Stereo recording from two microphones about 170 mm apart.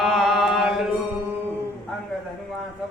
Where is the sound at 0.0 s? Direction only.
Centre (ahead or behind).